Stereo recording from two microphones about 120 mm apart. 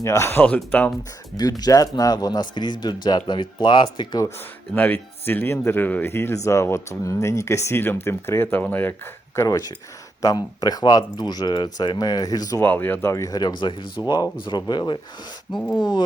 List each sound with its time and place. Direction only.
0.0 s speech: 25° left (ahead or behind)
1.4 s speech: 35° left (ahead or behind)
4.7 s speech: 15° left (ahead or behind)
12.6 s speech: 15° left (ahead or behind); by 14.9 s 40° left (ahead or behind)
15.5 s speech: centre (ahead or behind)
15.8 s speech: 35° left (ahead or behind)